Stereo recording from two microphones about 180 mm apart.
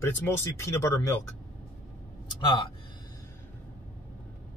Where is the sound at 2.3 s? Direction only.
25° left (ahead or behind).